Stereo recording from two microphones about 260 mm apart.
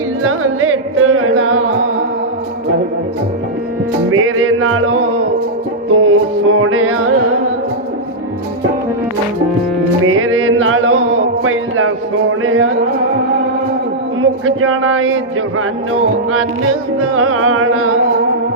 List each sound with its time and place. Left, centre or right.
0.2 s music: right
4.1 s music: right
10.1 s music: right
14.2 s speech: right
17.2 s music: right